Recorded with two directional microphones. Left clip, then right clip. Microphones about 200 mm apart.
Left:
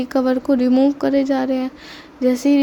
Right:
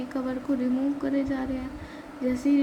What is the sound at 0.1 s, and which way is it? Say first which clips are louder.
Speech: left 13 dB; 50° left (ahead or behind).